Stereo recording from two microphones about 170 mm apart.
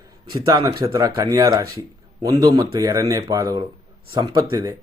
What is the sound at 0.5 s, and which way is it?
Speech, 25° right (ahead or behind).